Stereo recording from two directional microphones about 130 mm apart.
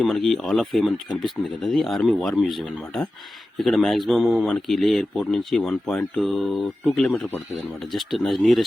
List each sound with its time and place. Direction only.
0.0 s speech: centre (ahead or behind)